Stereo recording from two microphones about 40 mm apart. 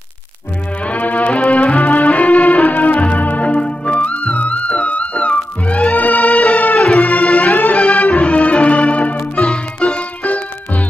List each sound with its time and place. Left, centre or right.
0.8 s music: left
7.7 s music: centre
8.0 s music: left